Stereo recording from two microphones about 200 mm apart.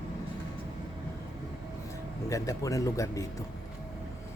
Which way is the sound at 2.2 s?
15° left (ahead or behind).